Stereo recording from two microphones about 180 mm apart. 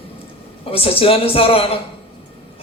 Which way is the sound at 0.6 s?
30° left (ahead or behind).